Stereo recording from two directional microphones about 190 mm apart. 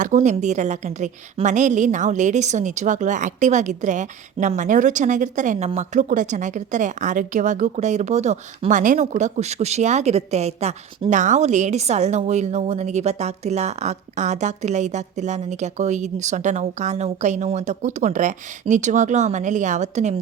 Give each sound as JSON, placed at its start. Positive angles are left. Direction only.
{"t": 0.0, "sound": "a woman's voice", "side_deg": -40}